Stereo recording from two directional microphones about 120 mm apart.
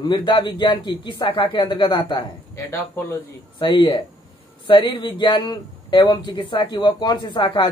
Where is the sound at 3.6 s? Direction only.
40° left (ahead or behind).